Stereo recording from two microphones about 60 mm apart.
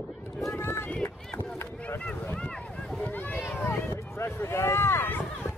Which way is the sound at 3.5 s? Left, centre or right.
Left.